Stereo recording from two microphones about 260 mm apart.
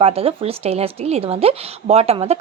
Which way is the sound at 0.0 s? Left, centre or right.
Right.